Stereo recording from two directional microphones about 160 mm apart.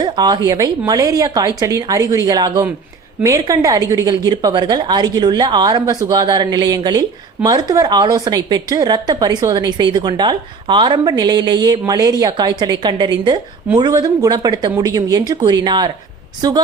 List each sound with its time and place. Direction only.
0.0 s a woman's voice: 25° right (ahead or behind)